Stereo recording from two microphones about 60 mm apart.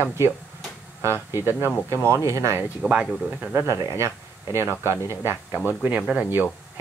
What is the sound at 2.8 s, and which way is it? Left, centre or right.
Speech, centre.